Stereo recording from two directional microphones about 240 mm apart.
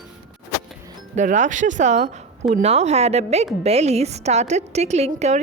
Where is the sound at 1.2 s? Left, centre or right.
Right.